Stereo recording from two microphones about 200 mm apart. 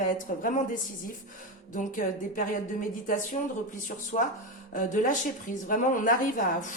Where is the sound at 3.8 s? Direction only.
40° left (ahead or behind).